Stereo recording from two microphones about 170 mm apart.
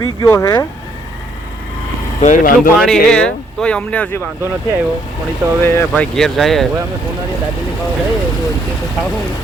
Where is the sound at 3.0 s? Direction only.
5° left (ahead or behind).